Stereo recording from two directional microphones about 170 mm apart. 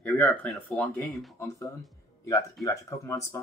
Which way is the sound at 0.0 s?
5° left (ahead or behind).